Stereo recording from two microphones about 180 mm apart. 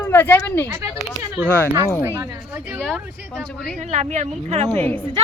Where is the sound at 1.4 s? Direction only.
10° left (ahead or behind).